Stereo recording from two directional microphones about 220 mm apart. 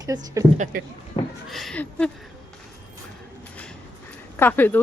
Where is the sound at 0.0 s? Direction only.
15° right (ahead or behind).